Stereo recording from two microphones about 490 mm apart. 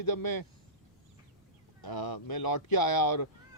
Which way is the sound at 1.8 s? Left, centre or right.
Left.